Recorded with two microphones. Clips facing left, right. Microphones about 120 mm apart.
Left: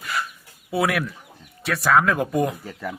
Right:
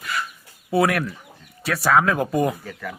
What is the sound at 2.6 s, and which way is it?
Speech, 25° left (ahead or behind).